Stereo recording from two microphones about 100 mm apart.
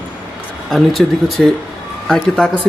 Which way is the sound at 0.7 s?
Centre (ahead or behind).